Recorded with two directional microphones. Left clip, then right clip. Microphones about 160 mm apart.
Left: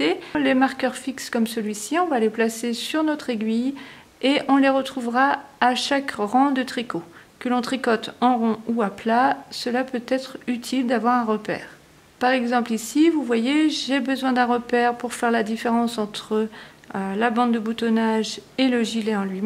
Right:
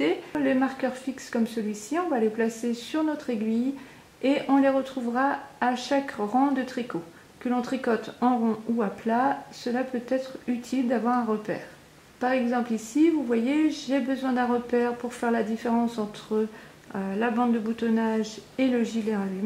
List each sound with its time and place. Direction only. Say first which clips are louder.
0.0 s a woman's voice: left 4 dB; 35° left (ahead or behind)